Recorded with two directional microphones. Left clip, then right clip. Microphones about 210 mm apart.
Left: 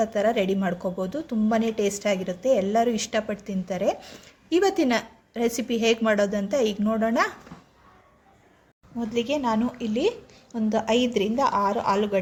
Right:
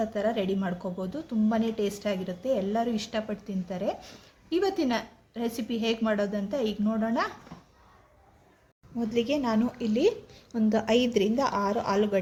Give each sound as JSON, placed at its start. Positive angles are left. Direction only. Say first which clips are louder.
{"t": 0.0, "sound": "a woman's voice", "louder": "left 6 dB", "side_deg": 15}
{"t": 9.0, "sound": "a woman's voice", "louder": "left 2 dB", "side_deg": 0}